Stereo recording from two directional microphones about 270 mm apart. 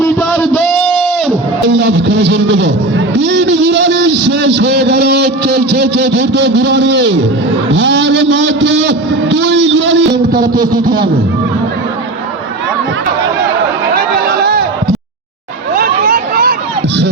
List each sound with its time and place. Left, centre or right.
0.0 s a sound: centre
1.6 s a man's voice: right
10.4 s a man's voice: right
13.9 s chatter: right
15.7 s vehicle: right